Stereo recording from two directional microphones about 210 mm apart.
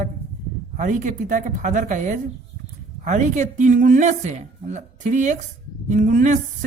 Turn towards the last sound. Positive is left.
turn(degrees=-35)  # may be behind; listen again after turning